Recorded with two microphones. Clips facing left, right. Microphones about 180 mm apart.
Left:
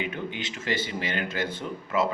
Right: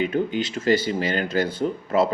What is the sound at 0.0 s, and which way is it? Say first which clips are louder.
Speech: right 9 dB; 40° right (ahead or behind).